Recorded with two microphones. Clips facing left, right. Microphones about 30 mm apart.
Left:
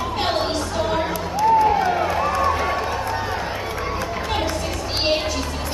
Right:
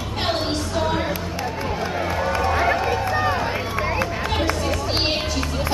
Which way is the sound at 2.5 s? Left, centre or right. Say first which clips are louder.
Right 2 dB; centre.